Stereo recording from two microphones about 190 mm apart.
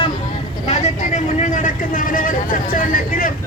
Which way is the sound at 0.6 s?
35° left (ahead or behind).